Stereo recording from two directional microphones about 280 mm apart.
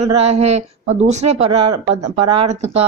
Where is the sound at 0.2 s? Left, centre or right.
Right.